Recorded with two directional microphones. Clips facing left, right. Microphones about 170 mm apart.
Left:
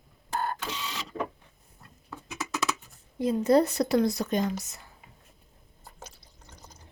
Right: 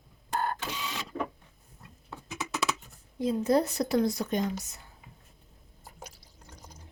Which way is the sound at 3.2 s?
75° left (ahead or behind).